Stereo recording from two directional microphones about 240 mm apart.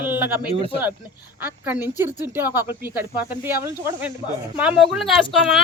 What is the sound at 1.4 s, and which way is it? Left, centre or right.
Speech, centre.